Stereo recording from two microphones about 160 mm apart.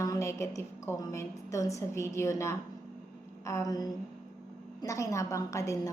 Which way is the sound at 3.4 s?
20° left (ahead or behind).